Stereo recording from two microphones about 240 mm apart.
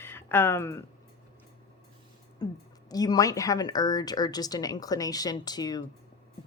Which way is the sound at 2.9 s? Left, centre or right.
Centre.